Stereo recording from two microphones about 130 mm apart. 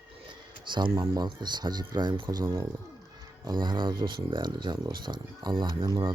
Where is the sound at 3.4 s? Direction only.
35° right (ahead or behind).